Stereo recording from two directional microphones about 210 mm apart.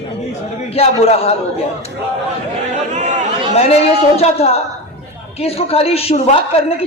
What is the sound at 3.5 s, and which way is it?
A woman's voice, 30° left (ahead or behind).